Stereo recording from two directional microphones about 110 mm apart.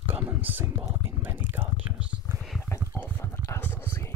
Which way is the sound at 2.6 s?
20° left (ahead or behind).